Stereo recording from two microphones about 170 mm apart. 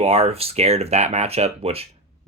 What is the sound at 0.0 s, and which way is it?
Speech, 35° right (ahead or behind).